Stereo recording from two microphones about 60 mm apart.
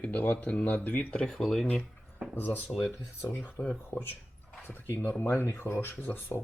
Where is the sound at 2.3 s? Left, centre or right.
Left.